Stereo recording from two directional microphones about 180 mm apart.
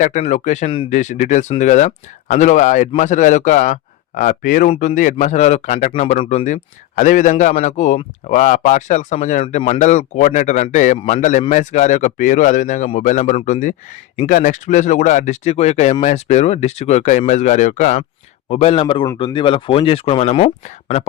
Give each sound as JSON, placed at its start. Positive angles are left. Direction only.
{"t": 0.0, "sound": "speech", "side_deg": 40}